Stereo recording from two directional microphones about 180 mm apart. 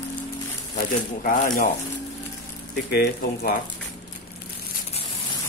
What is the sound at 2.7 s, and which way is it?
Speech, 60° left (ahead or behind).